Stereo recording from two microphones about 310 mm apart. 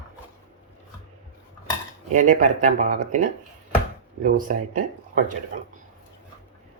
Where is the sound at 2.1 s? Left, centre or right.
Right.